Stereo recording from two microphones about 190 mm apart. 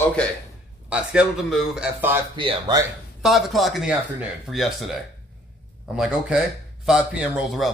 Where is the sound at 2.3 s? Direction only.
25° right (ahead or behind).